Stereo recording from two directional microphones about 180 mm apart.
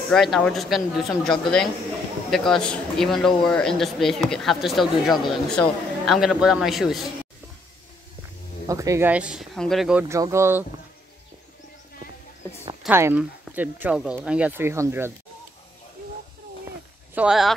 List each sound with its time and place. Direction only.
0.1 s speech: centre (ahead or behind)
8.6 s speech: 15° right (ahead or behind)
10.0 s speech: 15° right (ahead or behind)
12.8 s speech: 10° right (ahead or behind)
17.1 s speech: 5° right (ahead or behind)